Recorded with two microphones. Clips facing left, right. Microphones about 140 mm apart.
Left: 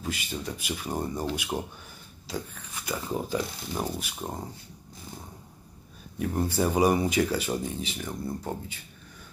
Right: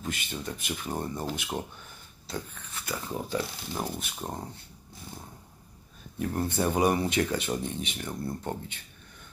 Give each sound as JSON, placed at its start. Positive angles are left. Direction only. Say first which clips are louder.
{"t": 0.0, "sound": "speech", "louder": "left 2 dB", "side_deg": 5}
{"t": 3.7, "sound": "speech", "louder": "left 2 dB", "side_deg": 5}
{"t": 6.1, "sound": "speech", "louder": "left 2 dB", "side_deg": 5}